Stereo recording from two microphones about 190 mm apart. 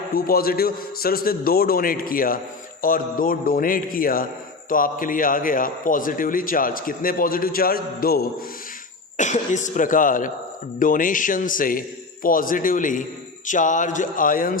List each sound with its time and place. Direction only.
0.1 s a man's voice: 50° left (ahead or behind)
9.1 s a man's voice: 40° left (ahead or behind)